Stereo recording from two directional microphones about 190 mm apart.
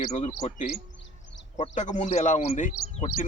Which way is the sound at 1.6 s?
40° left (ahead or behind).